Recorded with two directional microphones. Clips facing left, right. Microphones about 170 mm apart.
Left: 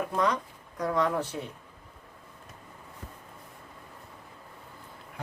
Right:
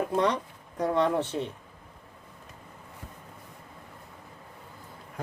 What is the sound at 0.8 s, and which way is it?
Speech, 30° right (ahead or behind).